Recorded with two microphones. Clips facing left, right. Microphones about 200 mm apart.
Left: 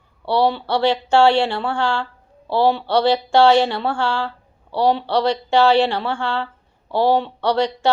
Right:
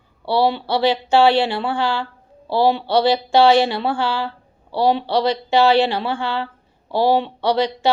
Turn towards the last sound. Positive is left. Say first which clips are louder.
# even
turn(degrees=-15)  # may be behind; listen again after turning